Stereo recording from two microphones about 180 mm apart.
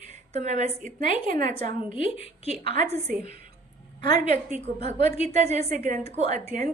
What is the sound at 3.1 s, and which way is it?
A woman's voice, 50° right (ahead or behind).